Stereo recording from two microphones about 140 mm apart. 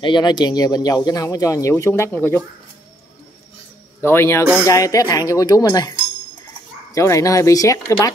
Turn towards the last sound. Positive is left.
turn(degrees=25)  # may be behind; listen again after turning